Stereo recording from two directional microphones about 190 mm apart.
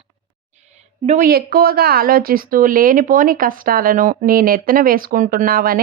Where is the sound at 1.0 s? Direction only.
40° right (ahead or behind).